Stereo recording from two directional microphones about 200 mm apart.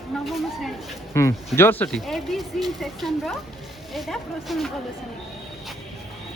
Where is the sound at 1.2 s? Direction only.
15° left (ahead or behind).